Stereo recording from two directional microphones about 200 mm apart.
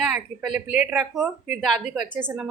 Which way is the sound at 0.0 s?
5° right (ahead or behind).